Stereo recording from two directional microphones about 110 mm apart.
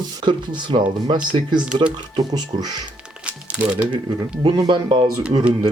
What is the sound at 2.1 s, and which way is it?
Speech, 35° right (ahead or behind).